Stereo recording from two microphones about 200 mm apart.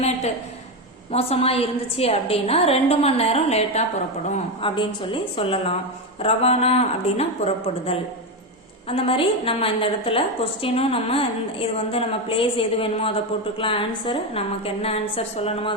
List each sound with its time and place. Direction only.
1.1 s a woman's voice: 30° left (ahead or behind)